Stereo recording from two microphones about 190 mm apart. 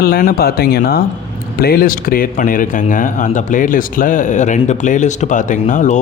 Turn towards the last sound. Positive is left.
turn(degrees=40)  # may be behind; listen again after turning